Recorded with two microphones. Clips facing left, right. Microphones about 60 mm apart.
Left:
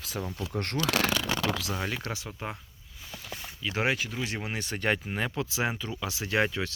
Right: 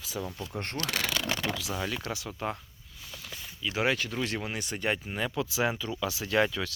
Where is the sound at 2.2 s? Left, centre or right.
Centre.